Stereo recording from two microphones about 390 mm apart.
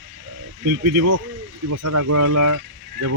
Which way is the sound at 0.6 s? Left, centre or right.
Right.